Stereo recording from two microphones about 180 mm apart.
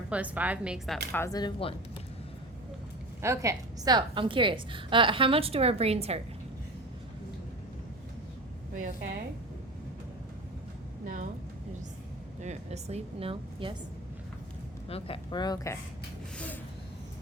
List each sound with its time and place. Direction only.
0.1 s a woman's voice: 10° right (ahead or behind)
1.1 s a woman's voice: 15° left (ahead or behind)
3.2 s a woman's voice: 15° right (ahead or behind); by 6.1 s 35° right (ahead or behind)
11.0 s a sound: 45° right (ahead or behind)
12.4 s a woman's voice: 40° right (ahead or behind)
14.8 s a woman's voice: 30° left (ahead or behind)